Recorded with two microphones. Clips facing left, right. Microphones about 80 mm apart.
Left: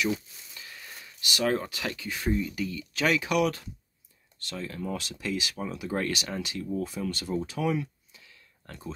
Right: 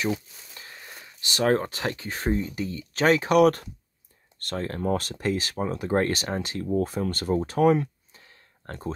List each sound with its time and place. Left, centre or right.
0.0 s speech: right